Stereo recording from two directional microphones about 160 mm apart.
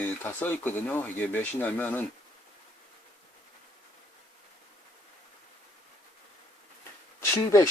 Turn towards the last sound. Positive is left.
turn(degrees=20)  # may be behind; listen again after turning